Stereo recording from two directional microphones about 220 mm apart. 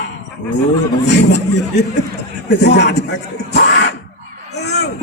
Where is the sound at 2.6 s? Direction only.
50° left (ahead or behind).